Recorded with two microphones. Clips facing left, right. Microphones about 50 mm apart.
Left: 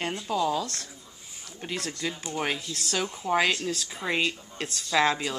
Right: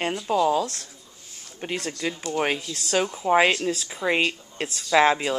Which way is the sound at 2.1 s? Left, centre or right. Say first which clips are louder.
Right 5 dB; centre.